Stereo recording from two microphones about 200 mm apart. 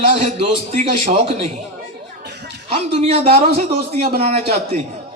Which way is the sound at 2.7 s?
30° right (ahead or behind).